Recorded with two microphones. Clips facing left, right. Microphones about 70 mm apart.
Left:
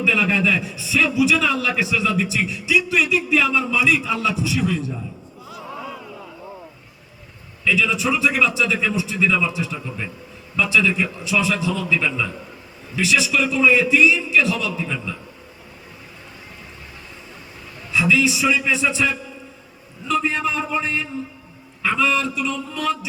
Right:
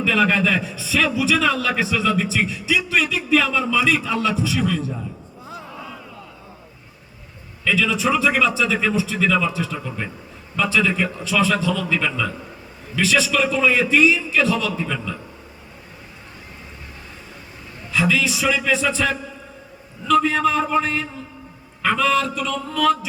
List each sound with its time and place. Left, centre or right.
0.0 s a man's voice: right
7.7 s a man's voice: right
11.9 s a man's voice: right
17.9 s a man's voice: right